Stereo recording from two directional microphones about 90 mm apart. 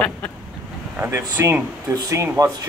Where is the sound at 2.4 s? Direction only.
45° right (ahead or behind).